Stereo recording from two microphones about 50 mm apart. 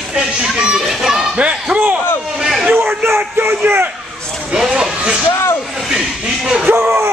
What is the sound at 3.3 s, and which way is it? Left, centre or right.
Speech, right.